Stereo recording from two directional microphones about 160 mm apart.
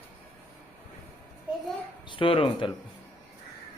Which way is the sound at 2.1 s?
35° left (ahead or behind).